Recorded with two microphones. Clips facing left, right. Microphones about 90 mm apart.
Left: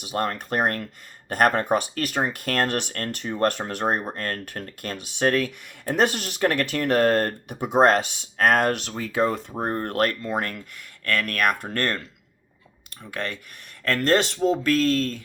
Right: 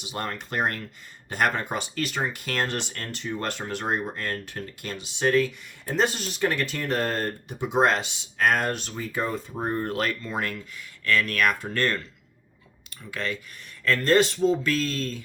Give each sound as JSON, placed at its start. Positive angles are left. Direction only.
{"t": 0.0, "sound": "speech", "side_deg": 50}
{"t": 8.9, "sound": "speech", "side_deg": 70}
{"t": 9.6, "sound": "speech", "side_deg": 55}
{"t": 13.1, "sound": "speech", "side_deg": 55}